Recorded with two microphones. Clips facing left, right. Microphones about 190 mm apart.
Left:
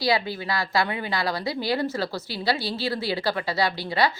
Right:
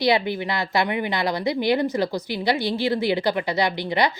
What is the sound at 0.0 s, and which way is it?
A woman's voice, 20° right (ahead or behind).